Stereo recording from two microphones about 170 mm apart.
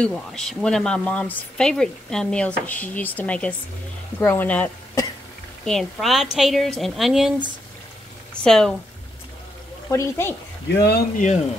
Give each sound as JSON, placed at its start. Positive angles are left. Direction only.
{"t": 0.0, "sound": "speech", "side_deg": 0}
{"t": 5.7, "sound": "speech", "side_deg": 0}
{"t": 8.5, "sound": "speech", "side_deg": 5}
{"t": 9.8, "sound": "speech", "side_deg": 15}
{"t": 10.7, "sound": "speech", "side_deg": 70}